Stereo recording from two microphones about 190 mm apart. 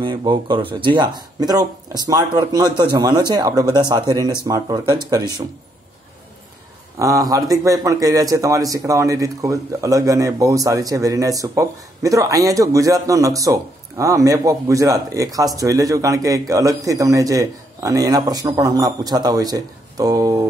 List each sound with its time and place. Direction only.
0.0 s speech: 25° right (ahead or behind)
7.0 s speech: 15° right (ahead or behind)